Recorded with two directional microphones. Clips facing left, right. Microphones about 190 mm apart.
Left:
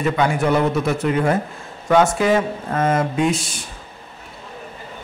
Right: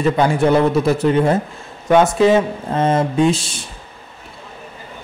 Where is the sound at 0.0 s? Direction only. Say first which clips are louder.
Right 4 dB; 30° right (ahead or behind).